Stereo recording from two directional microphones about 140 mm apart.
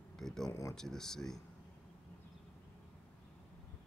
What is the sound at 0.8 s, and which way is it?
Speech, 5° left (ahead or behind).